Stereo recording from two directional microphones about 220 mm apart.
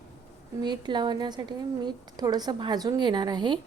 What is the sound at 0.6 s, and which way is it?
A woman's voice, 20° right (ahead or behind).